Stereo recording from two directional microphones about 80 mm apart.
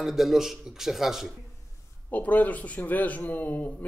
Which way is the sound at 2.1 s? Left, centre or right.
Left.